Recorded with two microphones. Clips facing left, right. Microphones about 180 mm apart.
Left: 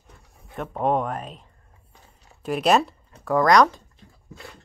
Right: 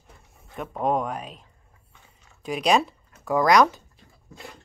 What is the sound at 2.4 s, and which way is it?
Speech, 5° left (ahead or behind).